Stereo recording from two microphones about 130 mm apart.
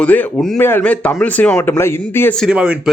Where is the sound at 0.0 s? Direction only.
10° left (ahead or behind).